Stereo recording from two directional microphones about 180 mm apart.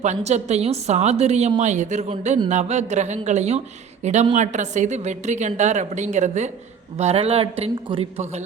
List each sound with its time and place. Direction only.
0.0 s a woman's voice: 40° right (ahead or behind)